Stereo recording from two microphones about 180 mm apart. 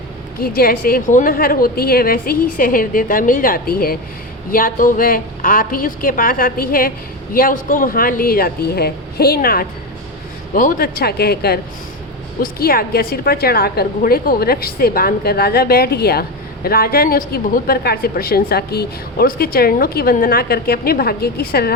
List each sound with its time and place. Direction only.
0.3 s a woman's voice: 55° left (ahead or behind)